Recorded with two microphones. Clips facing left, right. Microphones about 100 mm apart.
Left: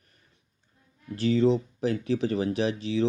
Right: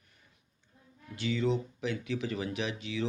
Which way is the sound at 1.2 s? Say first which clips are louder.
Left 8 dB; 35° left (ahead or behind).